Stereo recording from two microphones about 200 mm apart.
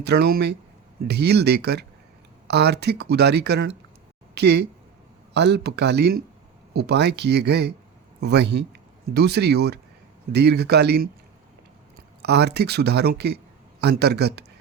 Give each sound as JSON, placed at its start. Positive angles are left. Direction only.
{"t": 0.0, "sound": "speech", "side_deg": -55}
{"t": 12.2, "sound": "speech", "side_deg": -55}